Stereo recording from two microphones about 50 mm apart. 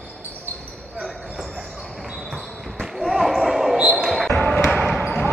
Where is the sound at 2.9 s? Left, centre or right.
Centre.